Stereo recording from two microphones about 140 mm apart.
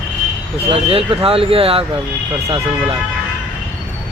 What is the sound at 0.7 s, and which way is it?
Speech, 40° right (ahead or behind).